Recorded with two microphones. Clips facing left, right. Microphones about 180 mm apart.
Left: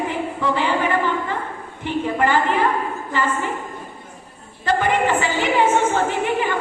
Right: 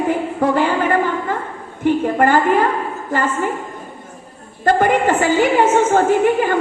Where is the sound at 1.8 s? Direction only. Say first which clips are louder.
Right 6 dB; 45° right (ahead or behind).